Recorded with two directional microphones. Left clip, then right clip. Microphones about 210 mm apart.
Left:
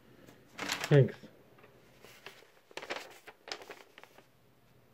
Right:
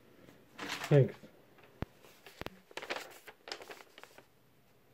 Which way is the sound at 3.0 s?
10° left (ahead or behind).